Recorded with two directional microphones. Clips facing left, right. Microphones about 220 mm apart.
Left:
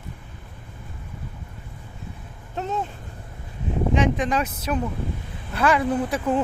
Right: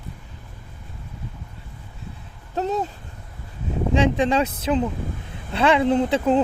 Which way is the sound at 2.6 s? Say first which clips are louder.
Right 4 dB; 35° right (ahead or behind).